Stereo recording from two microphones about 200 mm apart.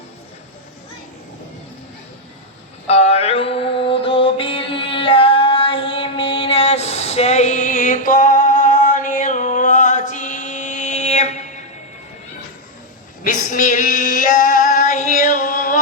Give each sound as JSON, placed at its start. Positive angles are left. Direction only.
{"t": 2.8, "sound": "music", "side_deg": 30}
{"t": 13.2, "sound": "female singing", "side_deg": 40}